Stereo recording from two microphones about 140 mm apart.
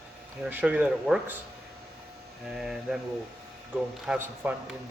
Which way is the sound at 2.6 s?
5° right (ahead or behind).